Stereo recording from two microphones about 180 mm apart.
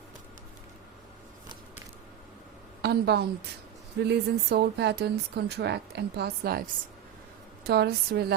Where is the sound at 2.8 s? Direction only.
65° right (ahead or behind).